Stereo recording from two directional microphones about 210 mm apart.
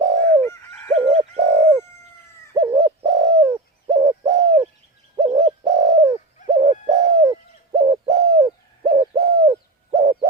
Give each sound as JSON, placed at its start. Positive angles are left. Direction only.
{"t": 0.0, "sound": "bird", "side_deg": -15}
{"t": 0.4, "sound": "bird", "side_deg": 10}
{"t": 0.9, "sound": "bird", "side_deg": -30}
{"t": 2.6, "sound": "bird", "side_deg": -15}